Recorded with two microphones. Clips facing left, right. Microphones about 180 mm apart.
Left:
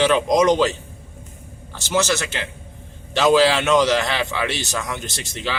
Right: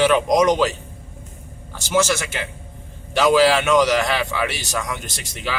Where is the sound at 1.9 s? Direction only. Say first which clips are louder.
Right 1 dB; 10° right (ahead or behind).